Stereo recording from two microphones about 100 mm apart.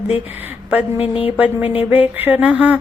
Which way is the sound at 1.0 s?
70° left (ahead or behind).